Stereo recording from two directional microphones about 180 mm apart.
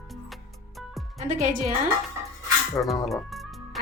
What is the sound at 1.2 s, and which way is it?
Speech, 45° right (ahead or behind).